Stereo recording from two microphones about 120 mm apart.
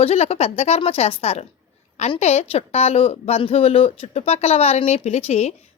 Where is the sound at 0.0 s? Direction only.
60° left (ahead or behind).